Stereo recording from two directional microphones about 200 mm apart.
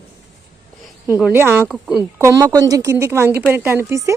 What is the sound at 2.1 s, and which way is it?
Speech, 15° right (ahead or behind).